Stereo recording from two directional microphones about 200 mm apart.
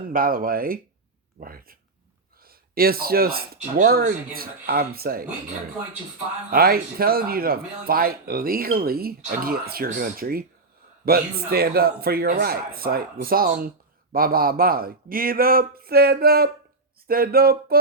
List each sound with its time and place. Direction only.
0.1 s speech: 45° right (ahead or behind)
6.5 s speech: 50° right (ahead or behind)